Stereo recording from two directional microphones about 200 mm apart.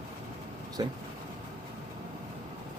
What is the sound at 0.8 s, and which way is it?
Speech, 20° right (ahead or behind).